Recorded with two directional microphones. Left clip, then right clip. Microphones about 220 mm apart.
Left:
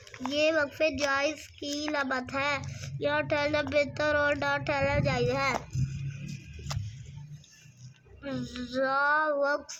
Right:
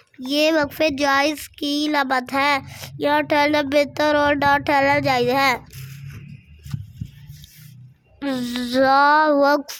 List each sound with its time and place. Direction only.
0.3 s speech: 45° right (ahead or behind)
8.2 s speech: 50° right (ahead or behind)